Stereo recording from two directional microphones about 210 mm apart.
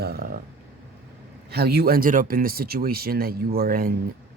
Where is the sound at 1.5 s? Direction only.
50° right (ahead or behind).